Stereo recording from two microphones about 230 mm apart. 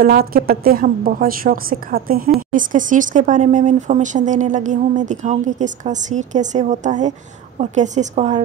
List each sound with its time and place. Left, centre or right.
0.0 s speech: right